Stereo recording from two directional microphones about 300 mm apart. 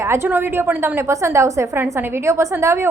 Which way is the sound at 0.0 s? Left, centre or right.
Centre.